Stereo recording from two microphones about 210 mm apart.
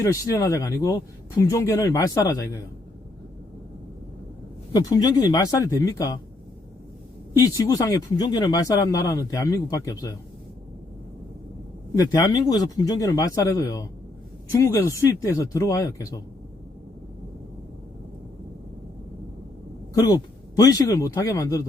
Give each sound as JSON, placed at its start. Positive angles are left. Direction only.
{"t": 0.0, "sound": "speech", "side_deg": 15}
{"t": 4.7, "sound": "speech", "side_deg": 15}
{"t": 7.3, "sound": "speech", "side_deg": 15}
{"t": 12.1, "sound": "speech", "side_deg": 15}
{"t": 19.9, "sound": "speech", "side_deg": 15}